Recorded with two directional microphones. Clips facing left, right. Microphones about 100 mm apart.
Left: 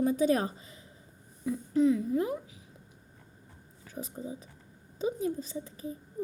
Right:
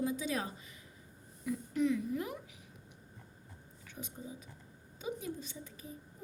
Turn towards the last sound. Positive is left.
turn(degrees=35)  # may be behind; listen again after turning